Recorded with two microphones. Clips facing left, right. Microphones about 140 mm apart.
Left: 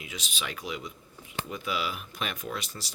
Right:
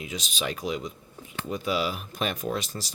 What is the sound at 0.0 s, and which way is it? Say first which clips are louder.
Speech: right 6 dB; 40° right (ahead or behind).